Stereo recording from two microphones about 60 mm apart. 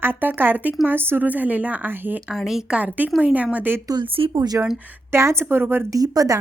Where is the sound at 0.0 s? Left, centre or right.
Right.